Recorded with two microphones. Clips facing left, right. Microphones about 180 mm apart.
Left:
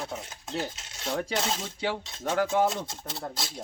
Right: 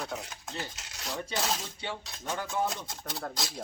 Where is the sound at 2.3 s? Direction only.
90° left.